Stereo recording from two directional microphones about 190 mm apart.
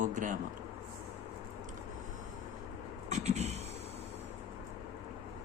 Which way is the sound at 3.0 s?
40° right (ahead or behind).